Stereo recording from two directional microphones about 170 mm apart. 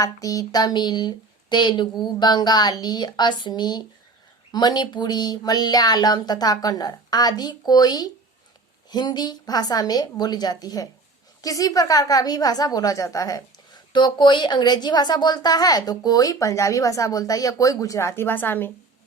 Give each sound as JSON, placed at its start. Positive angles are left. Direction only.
{"t": 0.0, "sound": "a woman's voice", "side_deg": 20}